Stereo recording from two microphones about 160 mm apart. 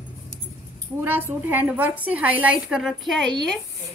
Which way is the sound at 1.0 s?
15° right (ahead or behind).